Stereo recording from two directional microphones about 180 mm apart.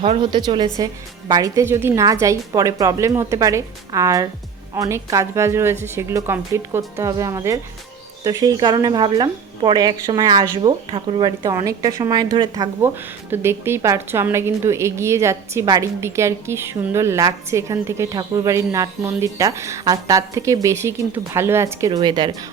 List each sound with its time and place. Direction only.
0.0 s a woman's voice: 30° right (ahead or behind)
13.3 s a woman's voice: 15° right (ahead or behind)